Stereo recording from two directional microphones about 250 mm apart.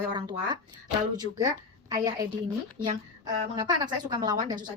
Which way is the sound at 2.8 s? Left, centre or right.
Right.